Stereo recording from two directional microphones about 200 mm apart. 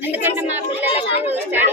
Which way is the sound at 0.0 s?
10° right (ahead or behind).